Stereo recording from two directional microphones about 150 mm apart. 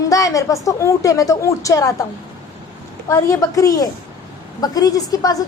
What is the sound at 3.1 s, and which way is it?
A woman's voice, 20° left (ahead or behind).